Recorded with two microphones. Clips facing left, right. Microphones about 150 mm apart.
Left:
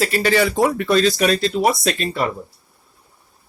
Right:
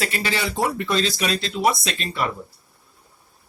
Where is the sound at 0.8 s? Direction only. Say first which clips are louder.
Left 6 dB; 65° left (ahead or behind).